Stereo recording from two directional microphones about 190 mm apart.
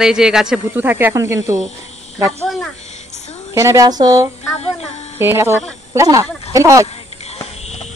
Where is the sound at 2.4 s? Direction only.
Centre (ahead or behind).